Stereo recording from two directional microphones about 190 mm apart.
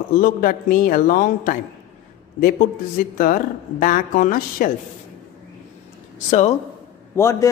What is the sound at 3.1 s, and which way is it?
A man's voice, 45° left (ahead or behind).